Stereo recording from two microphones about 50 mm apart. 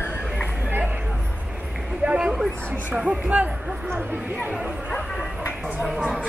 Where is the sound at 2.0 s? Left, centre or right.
Centre.